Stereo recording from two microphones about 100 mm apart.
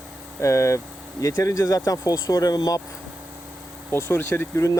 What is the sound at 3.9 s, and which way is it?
Speech, 25° left (ahead or behind).